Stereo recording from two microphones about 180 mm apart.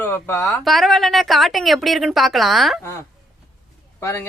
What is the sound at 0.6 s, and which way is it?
A woman's voice, centre (ahead or behind).